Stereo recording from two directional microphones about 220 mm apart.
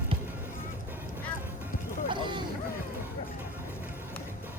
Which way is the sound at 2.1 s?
20° right (ahead or behind).